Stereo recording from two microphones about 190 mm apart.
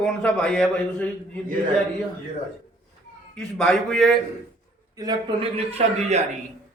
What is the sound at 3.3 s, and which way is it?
Speech, 5° left (ahead or behind).